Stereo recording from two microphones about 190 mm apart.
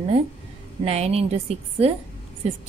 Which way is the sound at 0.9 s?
35° right (ahead or behind).